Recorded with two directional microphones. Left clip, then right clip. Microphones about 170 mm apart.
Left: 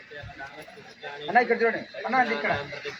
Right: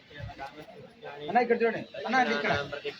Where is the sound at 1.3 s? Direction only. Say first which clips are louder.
Left 3 dB; 25° left (ahead or behind).